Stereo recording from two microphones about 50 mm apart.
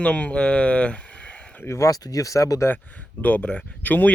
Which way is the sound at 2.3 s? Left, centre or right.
Left.